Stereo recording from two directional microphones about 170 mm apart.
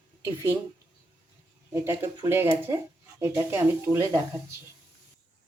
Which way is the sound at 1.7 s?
15° right (ahead or behind).